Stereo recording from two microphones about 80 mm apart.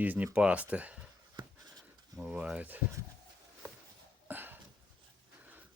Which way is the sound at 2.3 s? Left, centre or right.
Centre.